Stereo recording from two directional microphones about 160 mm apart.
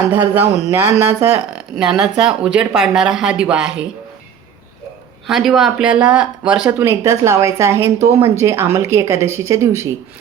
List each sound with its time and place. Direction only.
0.1 s speech: 15° right (ahead or behind)
5.3 s speech: centre (ahead or behind)